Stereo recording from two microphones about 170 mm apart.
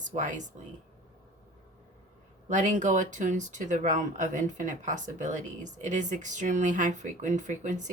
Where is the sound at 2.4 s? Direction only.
45° right (ahead or behind).